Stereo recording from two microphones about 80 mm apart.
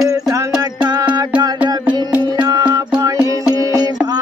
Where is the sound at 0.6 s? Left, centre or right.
Right.